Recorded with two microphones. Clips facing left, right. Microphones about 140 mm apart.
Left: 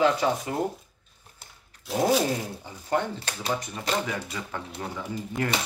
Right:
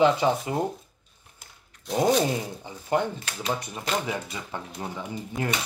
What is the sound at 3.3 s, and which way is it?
Speech, 35° left (ahead or behind).